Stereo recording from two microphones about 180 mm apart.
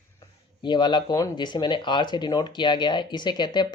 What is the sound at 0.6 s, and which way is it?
Speech, 25° left (ahead or behind).